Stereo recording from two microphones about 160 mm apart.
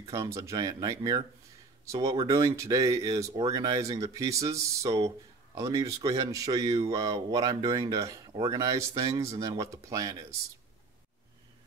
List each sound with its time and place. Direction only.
0.0 s speech: 20° right (ahead or behind)